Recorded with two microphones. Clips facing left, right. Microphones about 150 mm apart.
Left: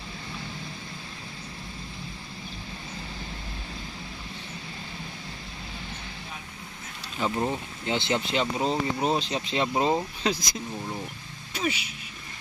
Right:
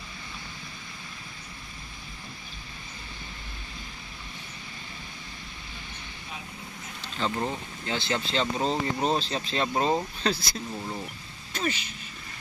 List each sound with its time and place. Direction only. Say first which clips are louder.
7.2 s speech: left 2 dB; 10° left (ahead or behind)